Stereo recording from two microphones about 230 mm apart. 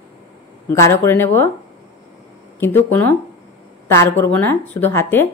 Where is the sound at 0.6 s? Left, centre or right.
Centre.